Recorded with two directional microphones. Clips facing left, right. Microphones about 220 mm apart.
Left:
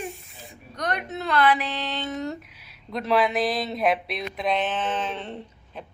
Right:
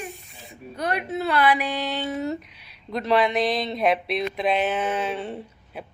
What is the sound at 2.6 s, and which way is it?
Speech, centre (ahead or behind).